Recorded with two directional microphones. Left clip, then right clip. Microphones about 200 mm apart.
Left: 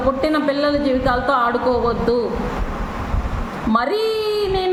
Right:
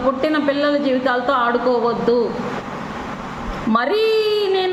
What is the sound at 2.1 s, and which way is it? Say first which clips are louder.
Speech: right 3 dB; 70° left (ahead or behind).